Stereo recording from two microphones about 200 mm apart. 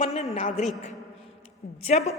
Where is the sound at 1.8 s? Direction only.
30° left (ahead or behind).